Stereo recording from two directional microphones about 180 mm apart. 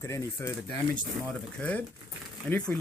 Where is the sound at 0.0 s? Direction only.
15° left (ahead or behind).